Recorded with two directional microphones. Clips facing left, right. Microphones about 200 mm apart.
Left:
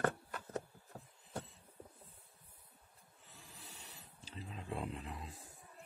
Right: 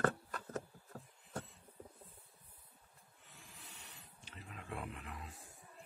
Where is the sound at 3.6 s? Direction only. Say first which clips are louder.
Left 3 dB; 35° left (ahead or behind).